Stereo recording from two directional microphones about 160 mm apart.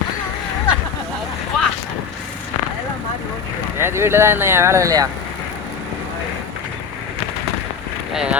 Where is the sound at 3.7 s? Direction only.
15° right (ahead or behind).